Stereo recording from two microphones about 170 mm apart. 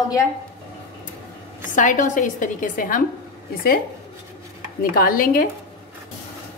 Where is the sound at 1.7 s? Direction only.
50° left (ahead or behind).